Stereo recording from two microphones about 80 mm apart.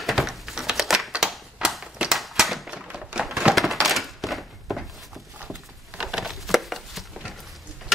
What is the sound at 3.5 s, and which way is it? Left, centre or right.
Thunk, centre.